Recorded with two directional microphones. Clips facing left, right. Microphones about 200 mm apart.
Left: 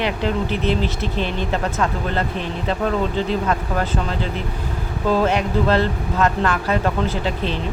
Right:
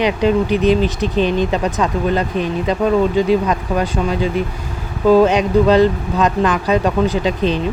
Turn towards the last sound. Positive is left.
turn(degrees=-15)  # may be behind; listen again after turning